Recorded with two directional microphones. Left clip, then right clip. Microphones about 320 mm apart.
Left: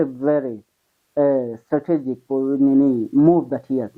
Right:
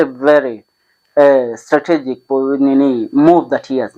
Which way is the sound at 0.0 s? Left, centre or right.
Centre.